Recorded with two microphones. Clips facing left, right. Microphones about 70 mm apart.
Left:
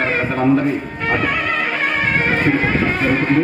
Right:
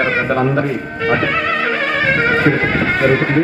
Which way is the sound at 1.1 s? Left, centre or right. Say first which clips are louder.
Right 3 dB; right.